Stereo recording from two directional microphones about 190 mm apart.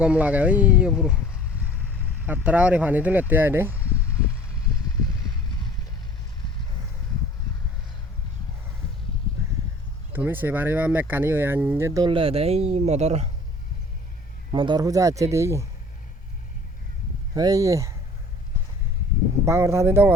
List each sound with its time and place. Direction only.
0.0 s speech: 5° right (ahead or behind)
2.2 s speech: 5° right (ahead or behind)
10.1 s speech: 10° right (ahead or behind); by 13.3 s 35° right (ahead or behind)
14.5 s speech: 25° right (ahead or behind)
17.3 s speech: 20° right (ahead or behind)
19.5 s speech: 15° right (ahead or behind)